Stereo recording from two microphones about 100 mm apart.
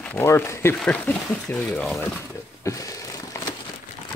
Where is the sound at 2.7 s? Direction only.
35° left (ahead or behind).